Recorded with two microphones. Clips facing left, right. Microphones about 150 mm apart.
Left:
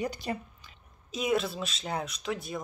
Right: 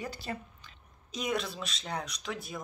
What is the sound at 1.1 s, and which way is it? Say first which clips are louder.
Speech: left 5 dB; 5° left (ahead or behind).